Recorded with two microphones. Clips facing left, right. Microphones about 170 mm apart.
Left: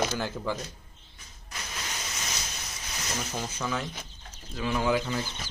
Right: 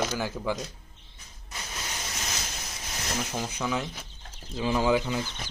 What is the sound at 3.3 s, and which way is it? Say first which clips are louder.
Speech: right 1 dB; 10° right (ahead or behind).